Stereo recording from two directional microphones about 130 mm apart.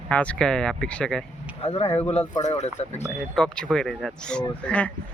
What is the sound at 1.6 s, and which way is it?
Speech, 50° left (ahead or behind).